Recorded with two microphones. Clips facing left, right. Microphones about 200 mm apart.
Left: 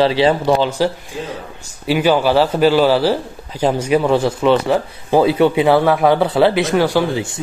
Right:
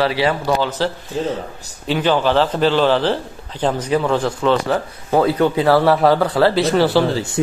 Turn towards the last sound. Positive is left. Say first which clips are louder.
# even
turn(degrees=10)  # may be behind; listen again after turning